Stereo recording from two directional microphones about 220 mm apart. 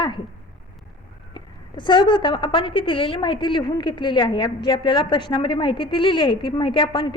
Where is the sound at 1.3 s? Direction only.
20° left (ahead or behind).